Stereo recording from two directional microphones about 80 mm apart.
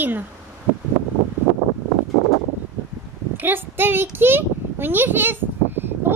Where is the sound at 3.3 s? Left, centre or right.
Right.